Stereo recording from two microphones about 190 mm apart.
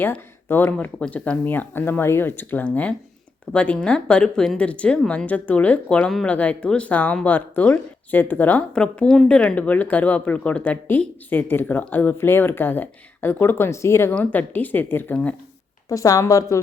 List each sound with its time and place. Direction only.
0.0 s speech: 10° left (ahead or behind)
15.9 s speech: 20° left (ahead or behind)